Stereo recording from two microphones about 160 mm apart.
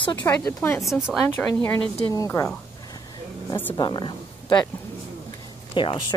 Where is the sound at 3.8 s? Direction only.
30° left (ahead or behind).